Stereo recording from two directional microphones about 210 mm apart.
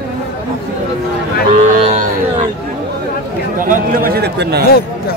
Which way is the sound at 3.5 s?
40° right (ahead or behind).